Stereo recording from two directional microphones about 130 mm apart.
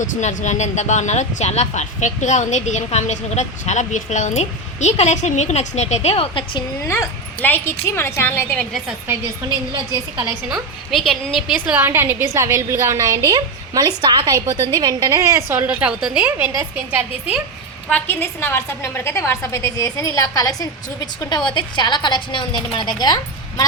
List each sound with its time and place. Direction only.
0.0 s speech: 65° left (ahead or behind)
6.8 s a woman's voice: 20° left (ahead or behind)
10.5 s a woman's voice: centre (ahead or behind)
17.8 s a woman's voice: 15° left (ahead or behind); by 23.6 s 30° left (ahead or behind)